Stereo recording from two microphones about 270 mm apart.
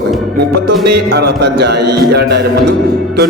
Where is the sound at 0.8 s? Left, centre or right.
Right.